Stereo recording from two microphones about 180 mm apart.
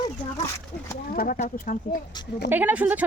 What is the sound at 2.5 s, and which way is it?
Speech, 10° right (ahead or behind).